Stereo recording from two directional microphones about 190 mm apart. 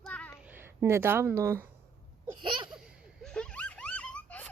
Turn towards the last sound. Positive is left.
turn(degrees=5)  # may be behind; listen again after turning